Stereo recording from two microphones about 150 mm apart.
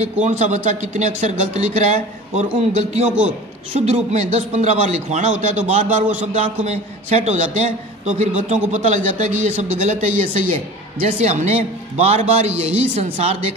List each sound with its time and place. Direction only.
0.0 s a man's voice: 50° right (ahead or behind)